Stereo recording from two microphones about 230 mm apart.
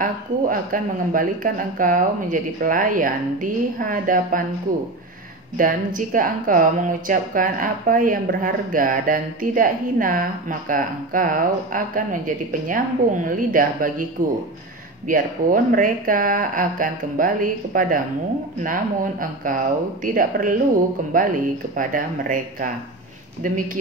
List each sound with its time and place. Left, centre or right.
0.0 s a woman's voice: right
5.6 s a woman's voice: right
15.0 s a woman's voice: right